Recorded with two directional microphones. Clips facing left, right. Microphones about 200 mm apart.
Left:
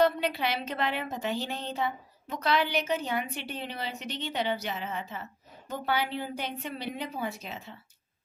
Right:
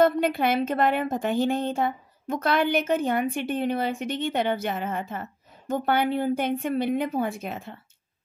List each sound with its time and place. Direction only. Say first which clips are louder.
0.0 s a woman's voice: right 5 dB; 50° right (ahead or behind)